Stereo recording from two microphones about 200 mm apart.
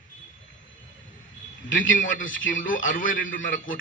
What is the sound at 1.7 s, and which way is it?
Speech, 70° left (ahead or behind).